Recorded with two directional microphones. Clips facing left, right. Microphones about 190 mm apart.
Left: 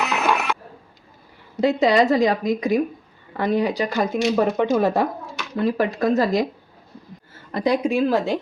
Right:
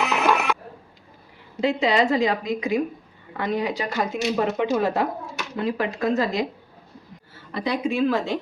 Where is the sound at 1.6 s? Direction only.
40° left (ahead or behind).